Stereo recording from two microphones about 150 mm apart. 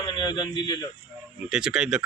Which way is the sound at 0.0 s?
30° left (ahead or behind).